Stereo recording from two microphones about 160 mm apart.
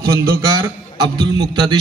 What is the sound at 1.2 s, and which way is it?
Speech, 30° right (ahead or behind).